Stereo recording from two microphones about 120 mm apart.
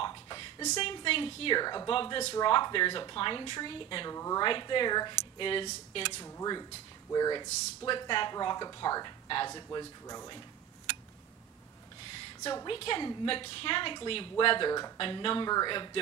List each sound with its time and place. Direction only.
0.0 s a sound: 35° left (ahead or behind)
0.7 s a woman's voice: 50° left (ahead or behind)
1.9 s a woman's voice: 45° left (ahead or behind)
2.3 s speech: 35° left (ahead or behind)
4.1 s a woman's voice: 25° left (ahead or behind)
4.4 s a woman's voice: 40° left (ahead or behind)
7.1 s speech: 35° left (ahead or behind)
12.6 s a woman's voice: 45° left (ahead or behind)
15.0 s speech: 45° left (ahead or behind)